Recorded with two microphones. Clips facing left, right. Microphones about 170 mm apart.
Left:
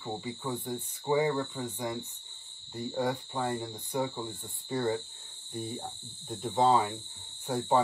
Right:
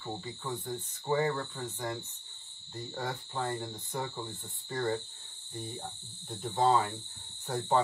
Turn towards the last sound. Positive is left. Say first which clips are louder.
# left 2 dB
turn(degrees=10)  # may be behind; listen again after turning